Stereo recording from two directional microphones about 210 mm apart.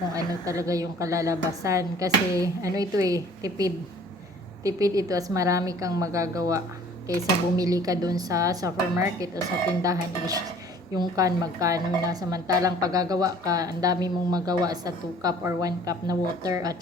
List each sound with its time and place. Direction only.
0.1 s a woman's voice: 15° right (ahead or behind)